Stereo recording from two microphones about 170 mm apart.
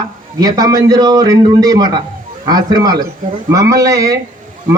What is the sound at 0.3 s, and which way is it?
A man's voice, 20° right (ahead or behind).